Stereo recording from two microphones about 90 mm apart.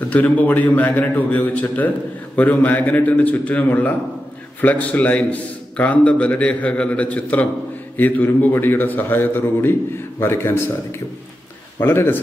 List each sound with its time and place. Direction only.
0.1 s a man's voice: 20° left (ahead or behind)